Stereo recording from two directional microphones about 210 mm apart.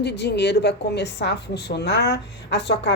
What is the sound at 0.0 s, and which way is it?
A woman's voice, 55° left (ahead or behind).